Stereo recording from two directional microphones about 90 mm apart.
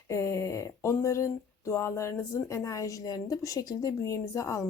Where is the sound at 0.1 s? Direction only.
35° left (ahead or behind).